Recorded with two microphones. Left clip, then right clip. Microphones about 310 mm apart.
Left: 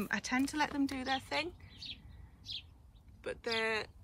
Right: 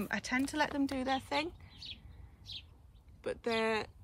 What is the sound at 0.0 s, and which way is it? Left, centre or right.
Speech, centre.